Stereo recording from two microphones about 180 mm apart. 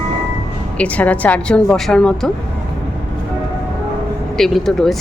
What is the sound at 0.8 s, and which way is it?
Speech, 10° left (ahead or behind).